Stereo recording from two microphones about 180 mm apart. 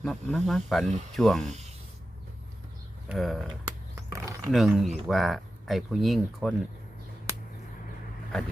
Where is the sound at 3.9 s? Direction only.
15° right (ahead or behind).